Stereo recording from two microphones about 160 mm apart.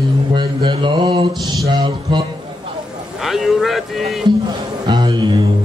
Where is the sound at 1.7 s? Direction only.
30° right (ahead or behind).